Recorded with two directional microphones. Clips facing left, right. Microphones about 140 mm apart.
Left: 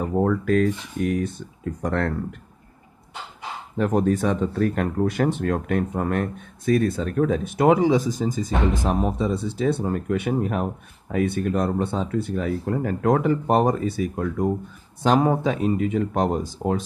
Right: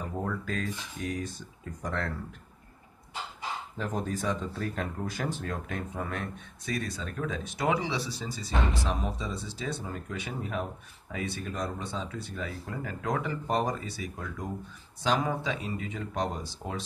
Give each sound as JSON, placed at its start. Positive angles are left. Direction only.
{"t": 0.0, "sound": "speech", "side_deg": 55}
{"t": 3.7, "sound": "speech", "side_deg": 65}